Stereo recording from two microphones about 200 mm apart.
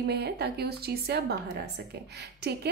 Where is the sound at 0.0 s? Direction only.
55° right (ahead or behind).